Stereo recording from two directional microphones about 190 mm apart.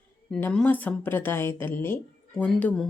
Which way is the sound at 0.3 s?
5° left (ahead or behind).